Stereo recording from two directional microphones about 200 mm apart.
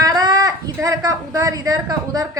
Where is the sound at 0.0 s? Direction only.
20° right (ahead or behind).